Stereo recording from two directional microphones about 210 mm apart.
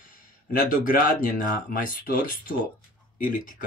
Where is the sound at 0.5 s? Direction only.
40° left (ahead or behind).